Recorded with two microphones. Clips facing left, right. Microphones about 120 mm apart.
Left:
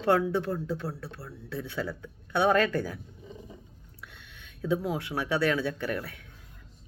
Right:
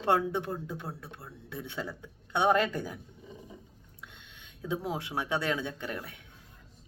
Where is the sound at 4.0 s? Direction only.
20° right (ahead or behind).